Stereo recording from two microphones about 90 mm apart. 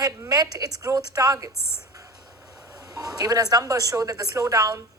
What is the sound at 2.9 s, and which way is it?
A woman's voice, 45° right (ahead or behind).